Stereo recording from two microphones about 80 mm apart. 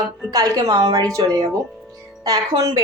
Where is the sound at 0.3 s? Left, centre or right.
Right.